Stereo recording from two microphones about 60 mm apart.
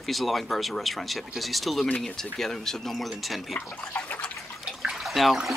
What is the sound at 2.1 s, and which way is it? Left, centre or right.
Speech, centre.